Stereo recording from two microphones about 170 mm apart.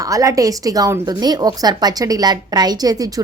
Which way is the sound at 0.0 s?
20° right (ahead or behind).